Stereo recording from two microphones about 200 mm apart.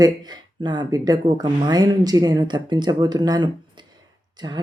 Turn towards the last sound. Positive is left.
turn(degrees=-20)  # may be behind; listen again after turning